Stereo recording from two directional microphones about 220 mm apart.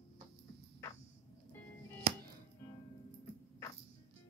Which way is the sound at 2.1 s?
30° right (ahead or behind).